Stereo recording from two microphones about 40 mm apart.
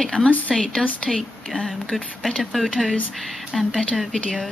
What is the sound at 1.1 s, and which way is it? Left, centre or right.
Speech, centre.